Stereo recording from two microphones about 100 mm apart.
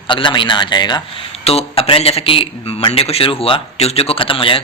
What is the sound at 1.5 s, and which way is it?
Speech, 80° left.